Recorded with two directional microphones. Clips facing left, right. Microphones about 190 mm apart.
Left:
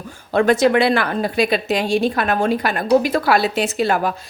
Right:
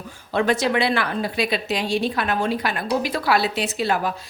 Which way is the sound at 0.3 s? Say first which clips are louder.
Left 6 dB; 50° left (ahead or behind).